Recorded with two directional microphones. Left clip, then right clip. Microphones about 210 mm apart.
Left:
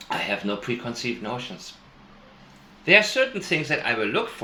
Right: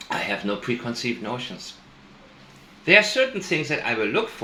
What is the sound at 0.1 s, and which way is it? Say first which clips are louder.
Speech: even; 15° right (ahead or behind).